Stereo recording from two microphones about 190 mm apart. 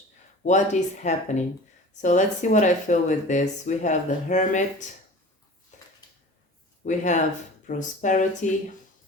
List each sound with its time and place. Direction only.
0.4 s speech: 40° left (ahead or behind)
6.8 s speech: 40° left (ahead or behind)